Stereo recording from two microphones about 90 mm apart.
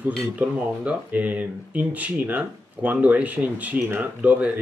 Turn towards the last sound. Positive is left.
turn(degrees=-15)  # may be behind; listen again after turning